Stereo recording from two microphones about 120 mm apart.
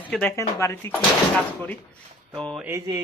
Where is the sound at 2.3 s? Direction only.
5° left (ahead or behind).